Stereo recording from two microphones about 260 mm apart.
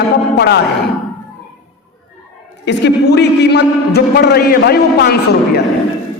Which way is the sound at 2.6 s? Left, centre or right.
Left.